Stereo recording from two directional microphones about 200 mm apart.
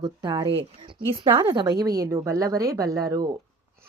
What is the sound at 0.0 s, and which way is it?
A woman's voice, 20° right (ahead or behind).